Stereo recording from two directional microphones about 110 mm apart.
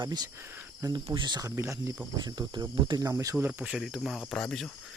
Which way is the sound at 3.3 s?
15° right (ahead or behind).